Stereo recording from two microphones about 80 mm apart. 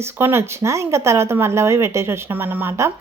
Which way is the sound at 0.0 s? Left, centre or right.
Right.